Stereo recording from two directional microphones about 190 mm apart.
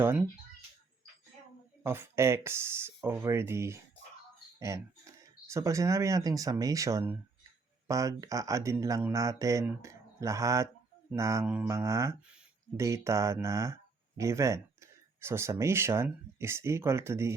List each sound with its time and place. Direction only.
0.0 s speech: 10° right (ahead or behind)
1.8 s speech: 10° right (ahead or behind)